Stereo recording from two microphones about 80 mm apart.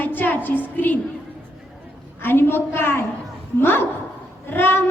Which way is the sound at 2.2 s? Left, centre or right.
Left.